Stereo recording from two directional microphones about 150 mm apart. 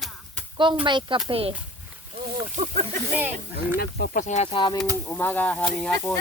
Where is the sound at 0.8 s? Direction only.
30° right (ahead or behind).